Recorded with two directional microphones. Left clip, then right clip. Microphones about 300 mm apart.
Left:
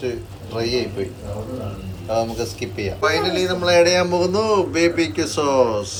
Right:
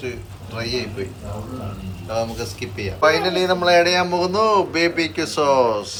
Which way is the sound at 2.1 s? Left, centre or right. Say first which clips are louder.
Left 2 dB; centre.